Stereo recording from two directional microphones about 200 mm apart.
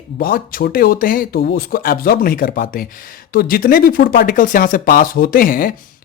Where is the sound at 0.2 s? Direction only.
45° left (ahead or behind).